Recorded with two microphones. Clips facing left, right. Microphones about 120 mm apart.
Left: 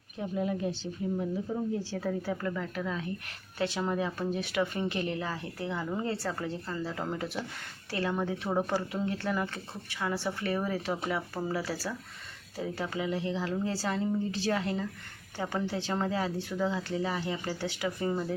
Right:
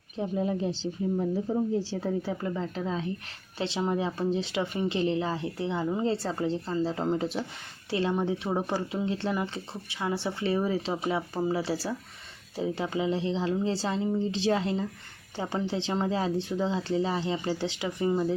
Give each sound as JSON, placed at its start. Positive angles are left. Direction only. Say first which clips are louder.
{"t": 0.2, "sound": "speech", "louder": "right 3 dB", "side_deg": -30}